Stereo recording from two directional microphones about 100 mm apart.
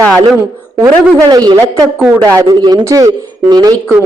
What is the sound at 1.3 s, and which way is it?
Speech, 45° right (ahead or behind).